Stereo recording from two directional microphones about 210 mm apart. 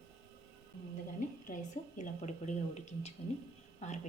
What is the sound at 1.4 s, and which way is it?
A woman's voice, 35° left (ahead or behind).